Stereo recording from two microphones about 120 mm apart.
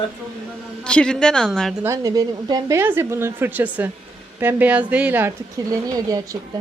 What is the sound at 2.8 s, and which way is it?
Speech, 20° right (ahead or behind).